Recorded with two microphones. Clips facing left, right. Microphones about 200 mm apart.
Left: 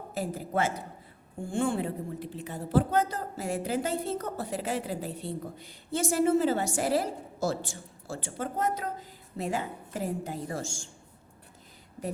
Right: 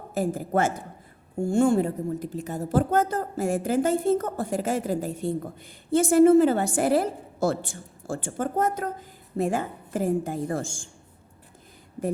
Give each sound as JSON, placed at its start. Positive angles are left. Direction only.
{"t": 0.1, "sound": "a woman's voice", "side_deg": -50}